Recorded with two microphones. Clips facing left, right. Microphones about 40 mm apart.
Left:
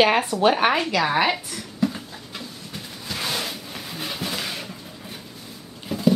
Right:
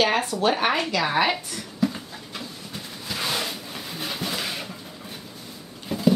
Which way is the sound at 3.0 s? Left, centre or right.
Centre.